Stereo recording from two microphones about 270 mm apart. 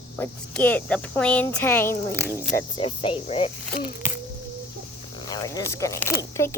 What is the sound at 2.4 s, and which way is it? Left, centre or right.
Speech, left.